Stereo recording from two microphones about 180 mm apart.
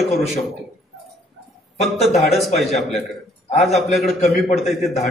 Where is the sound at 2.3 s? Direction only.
Centre (ahead or behind).